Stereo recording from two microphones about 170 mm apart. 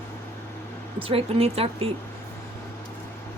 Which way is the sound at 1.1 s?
35° right (ahead or behind).